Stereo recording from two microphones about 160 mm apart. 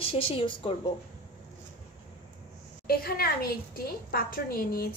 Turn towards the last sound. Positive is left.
turn(degrees=70)  # may be behind; listen again after turning